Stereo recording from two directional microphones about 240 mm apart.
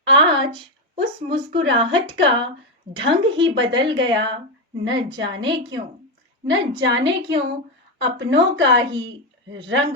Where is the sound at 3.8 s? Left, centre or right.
Right.